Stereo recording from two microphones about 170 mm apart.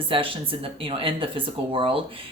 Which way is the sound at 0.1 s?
35° right (ahead or behind).